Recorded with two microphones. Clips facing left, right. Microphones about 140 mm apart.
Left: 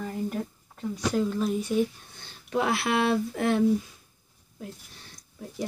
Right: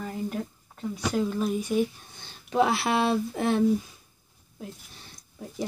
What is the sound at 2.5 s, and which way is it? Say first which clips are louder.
Speech: right 2 dB; 25° right (ahead or behind).